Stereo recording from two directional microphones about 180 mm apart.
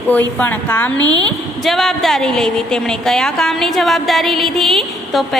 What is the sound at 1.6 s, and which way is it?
A woman's voice, centre (ahead or behind).